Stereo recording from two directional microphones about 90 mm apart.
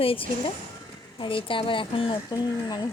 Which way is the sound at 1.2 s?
70° left (ahead or behind).